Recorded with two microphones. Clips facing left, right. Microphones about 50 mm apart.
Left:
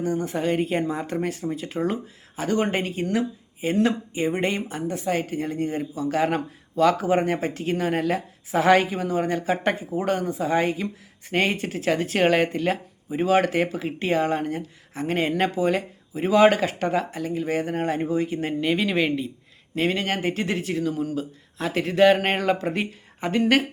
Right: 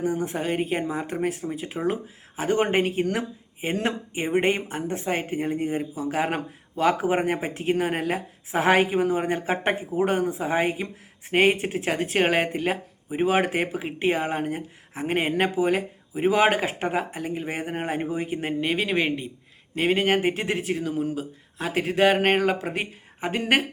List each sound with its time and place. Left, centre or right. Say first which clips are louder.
0.0 s speech: left 1 dB; centre
2.8 s speech: even; right
18.7 s speech: left 2 dB; centre